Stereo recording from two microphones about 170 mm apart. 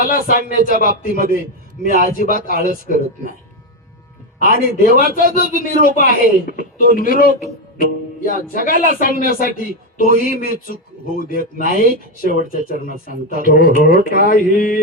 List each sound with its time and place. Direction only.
0.0 s speech: 55° left (ahead or behind)
4.4 s speech: 50° left (ahead or behind)